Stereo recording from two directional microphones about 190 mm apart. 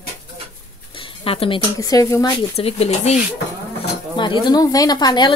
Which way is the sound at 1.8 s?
15° left (ahead or behind).